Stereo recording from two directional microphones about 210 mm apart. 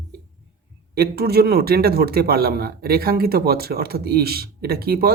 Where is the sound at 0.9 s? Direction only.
50° right (ahead or behind).